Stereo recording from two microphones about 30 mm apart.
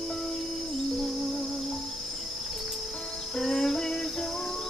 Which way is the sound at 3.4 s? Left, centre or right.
Centre.